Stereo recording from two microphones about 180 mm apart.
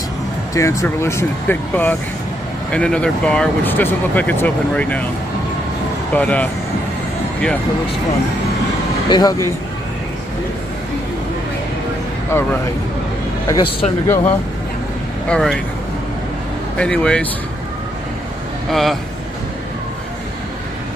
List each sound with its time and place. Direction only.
0.6 s speech: 15° left (ahead or behind)
6.1 s speech: 10° left (ahead or behind)
9.1 s speech: 20° left (ahead or behind)
13.5 s speech: 25° left (ahead or behind)
14.0 s speech: 15° left (ahead or behind)
16.7 s speech: 5° left (ahead or behind)
18.7 s speech: centre (ahead or behind)